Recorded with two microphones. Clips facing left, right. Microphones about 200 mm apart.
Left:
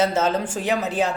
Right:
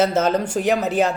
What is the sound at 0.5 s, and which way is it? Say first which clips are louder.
Speech: right 6 dB; 55° right (ahead or behind).